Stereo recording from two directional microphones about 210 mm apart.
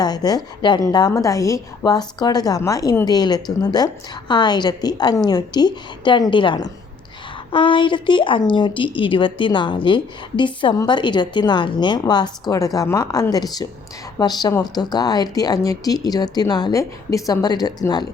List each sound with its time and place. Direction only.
0.0 s speech: 20° left (ahead or behind)